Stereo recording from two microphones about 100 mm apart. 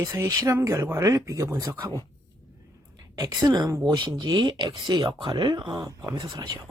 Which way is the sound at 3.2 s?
40° right (ahead or behind).